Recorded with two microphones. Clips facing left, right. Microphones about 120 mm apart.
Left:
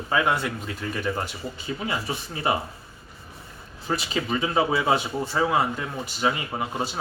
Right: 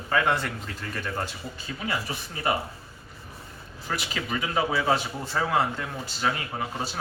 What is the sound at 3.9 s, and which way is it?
A man's voice, 25° left (ahead or behind).